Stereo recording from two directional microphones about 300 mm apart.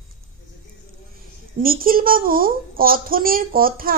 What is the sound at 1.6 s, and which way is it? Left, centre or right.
Speech, right.